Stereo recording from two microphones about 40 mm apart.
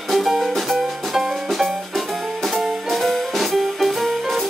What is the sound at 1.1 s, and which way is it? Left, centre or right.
Music, centre.